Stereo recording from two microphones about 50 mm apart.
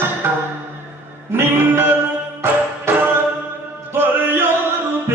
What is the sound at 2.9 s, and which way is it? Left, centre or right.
Music, right.